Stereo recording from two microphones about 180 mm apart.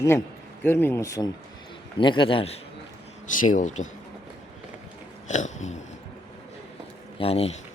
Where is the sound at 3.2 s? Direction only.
45° left (ahead or behind).